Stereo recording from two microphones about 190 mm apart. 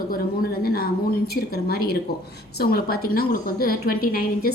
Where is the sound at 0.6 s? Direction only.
50° left (ahead or behind).